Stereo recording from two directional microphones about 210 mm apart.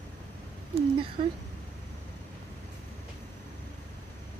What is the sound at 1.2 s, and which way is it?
Speech, 30° right (ahead or behind).